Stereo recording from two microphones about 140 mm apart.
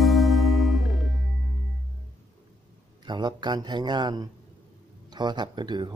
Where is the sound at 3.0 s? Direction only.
30° right (ahead or behind).